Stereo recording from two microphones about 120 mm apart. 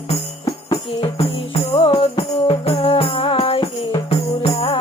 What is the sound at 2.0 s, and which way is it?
Music, 50° left (ahead or behind).